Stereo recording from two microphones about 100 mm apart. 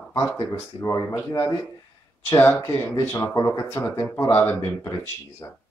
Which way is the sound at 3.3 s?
35° left (ahead or behind).